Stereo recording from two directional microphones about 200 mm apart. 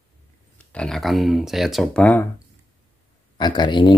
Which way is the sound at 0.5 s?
5° left (ahead or behind).